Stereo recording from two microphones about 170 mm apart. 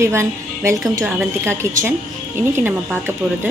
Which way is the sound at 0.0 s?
15° right (ahead or behind).